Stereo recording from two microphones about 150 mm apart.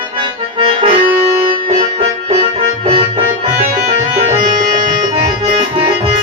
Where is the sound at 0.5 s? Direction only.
35° right (ahead or behind).